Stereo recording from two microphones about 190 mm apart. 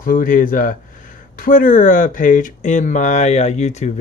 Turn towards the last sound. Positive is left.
turn(degrees=35)  # may be behind; listen again after turning